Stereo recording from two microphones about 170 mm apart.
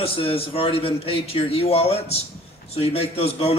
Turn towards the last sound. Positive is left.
turn(degrees=35)  # may be behind; listen again after turning